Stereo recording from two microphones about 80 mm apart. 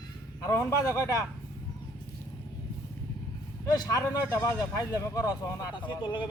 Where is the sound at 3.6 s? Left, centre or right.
Left.